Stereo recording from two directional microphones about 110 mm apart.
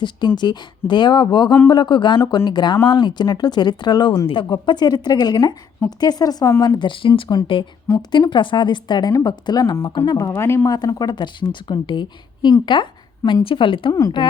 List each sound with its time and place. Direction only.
0.3 s a woman's voice: 40° left (ahead or behind); by 10.7 s 25° left (ahead or behind)
10.7 s a woman's voice: 35° left (ahead or behind)